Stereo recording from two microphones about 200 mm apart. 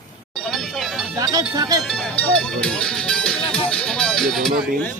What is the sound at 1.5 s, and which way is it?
Speech, 20° right (ahead or behind).